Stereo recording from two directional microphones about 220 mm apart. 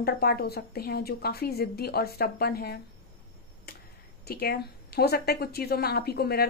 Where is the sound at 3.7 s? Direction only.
45° left (ahead or behind).